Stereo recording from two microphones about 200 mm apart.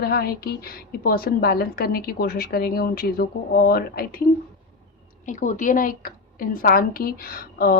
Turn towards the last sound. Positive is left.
turn(degrees=50)  # may be behind; listen again after turning